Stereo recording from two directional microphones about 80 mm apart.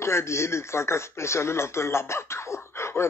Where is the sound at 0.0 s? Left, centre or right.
Left.